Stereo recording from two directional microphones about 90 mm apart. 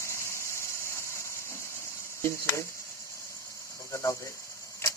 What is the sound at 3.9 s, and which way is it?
Speech, 35° left (ahead or behind).